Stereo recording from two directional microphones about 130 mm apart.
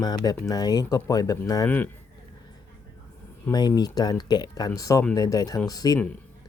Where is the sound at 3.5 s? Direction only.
30° left (ahead or behind).